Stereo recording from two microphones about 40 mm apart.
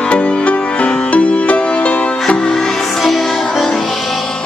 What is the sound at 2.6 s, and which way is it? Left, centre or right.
Music, centre.